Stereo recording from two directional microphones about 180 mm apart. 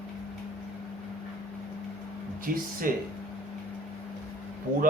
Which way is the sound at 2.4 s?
50° right (ahead or behind).